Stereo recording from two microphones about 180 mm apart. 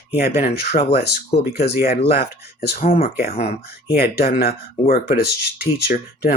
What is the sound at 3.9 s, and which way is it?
Speech, 60° left (ahead or behind).